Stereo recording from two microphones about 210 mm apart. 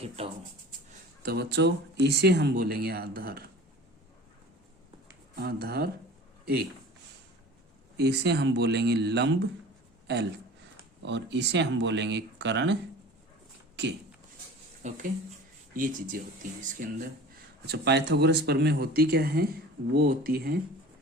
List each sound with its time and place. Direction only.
1.2 s speech: 50° right (ahead or behind)
5.4 s speech: 50° right (ahead or behind)
7.9 s speech: 50° right (ahead or behind)
11.0 s speech: 55° right (ahead or behind)
14.8 s speech: 35° right (ahead or behind)
17.7 s speech: 50° right (ahead or behind)